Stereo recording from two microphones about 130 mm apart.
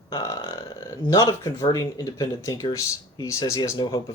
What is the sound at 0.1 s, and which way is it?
Speech, 30° left (ahead or behind).